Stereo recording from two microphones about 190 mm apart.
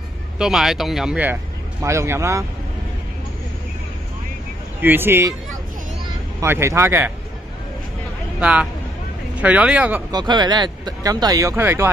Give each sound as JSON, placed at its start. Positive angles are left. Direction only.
{"t": 0.4, "sound": "speech", "side_deg": 0}
{"t": 4.8, "sound": "speech", "side_deg": -10}
{"t": 6.4, "sound": "speech", "side_deg": -15}
{"t": 8.4, "sound": "speech", "side_deg": -5}
{"t": 10.1, "sound": "speech", "side_deg": -20}